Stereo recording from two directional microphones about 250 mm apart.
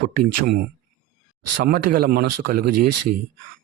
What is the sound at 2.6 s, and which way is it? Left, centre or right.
Speech, right.